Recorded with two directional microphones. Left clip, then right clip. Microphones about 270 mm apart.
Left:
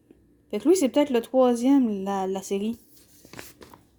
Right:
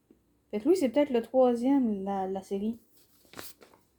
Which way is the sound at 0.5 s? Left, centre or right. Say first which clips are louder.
Left 5 dB; left.